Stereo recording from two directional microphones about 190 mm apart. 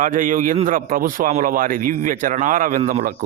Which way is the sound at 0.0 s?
45° right (ahead or behind).